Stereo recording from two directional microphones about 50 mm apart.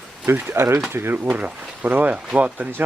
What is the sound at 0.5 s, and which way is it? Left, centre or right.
Speech, right.